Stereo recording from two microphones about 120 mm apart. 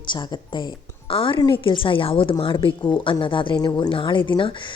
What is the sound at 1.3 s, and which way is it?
A woman's voice, 40° left (ahead or behind).